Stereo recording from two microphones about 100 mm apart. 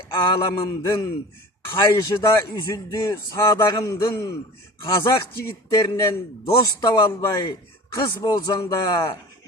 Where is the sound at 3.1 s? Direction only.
30° left (ahead or behind).